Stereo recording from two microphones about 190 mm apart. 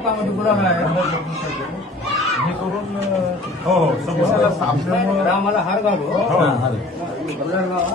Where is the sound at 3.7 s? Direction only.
Centre (ahead or behind).